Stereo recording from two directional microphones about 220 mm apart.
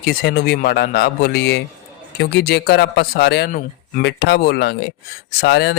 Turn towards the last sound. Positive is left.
turn(degrees=50)  # may be behind; listen again after turning